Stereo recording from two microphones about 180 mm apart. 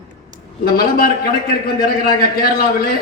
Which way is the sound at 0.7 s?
55° left (ahead or behind).